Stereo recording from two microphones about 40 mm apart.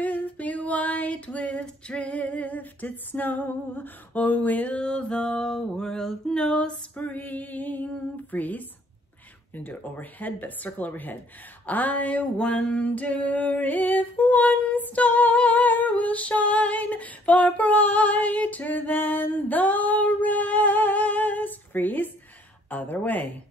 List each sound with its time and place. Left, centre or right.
0.0 s female singing: left
4.7 s music: left
7.2 s female singing: left
11.6 s a sound: left
12.4 s female singing: left